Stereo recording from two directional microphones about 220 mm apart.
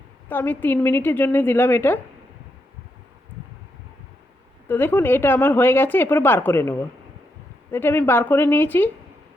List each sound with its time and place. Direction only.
0.3 s a woman's voice: 10° left (ahead or behind)
4.7 s a woman's voice: 10° left (ahead or behind)